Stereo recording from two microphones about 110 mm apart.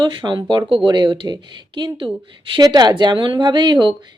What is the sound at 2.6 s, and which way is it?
Speech, 35° right (ahead or behind).